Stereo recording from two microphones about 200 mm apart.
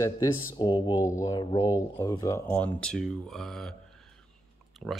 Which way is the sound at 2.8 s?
5° left (ahead or behind).